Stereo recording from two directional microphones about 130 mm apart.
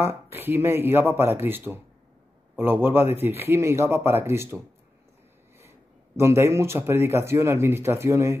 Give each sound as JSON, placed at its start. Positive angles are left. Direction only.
{"t": 0.0, "sound": "speech", "side_deg": -15}
{"t": 6.1, "sound": "speech", "side_deg": -20}